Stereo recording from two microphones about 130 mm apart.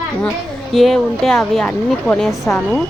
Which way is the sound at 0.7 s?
Centre (ahead or behind).